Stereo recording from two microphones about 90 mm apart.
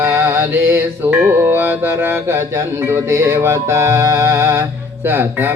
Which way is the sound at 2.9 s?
30° right (ahead or behind).